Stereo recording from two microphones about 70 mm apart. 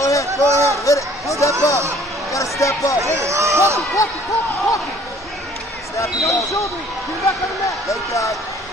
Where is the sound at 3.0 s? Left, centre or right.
Right.